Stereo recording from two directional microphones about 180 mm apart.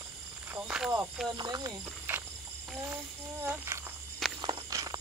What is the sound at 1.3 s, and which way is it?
Speech, 20° right (ahead or behind).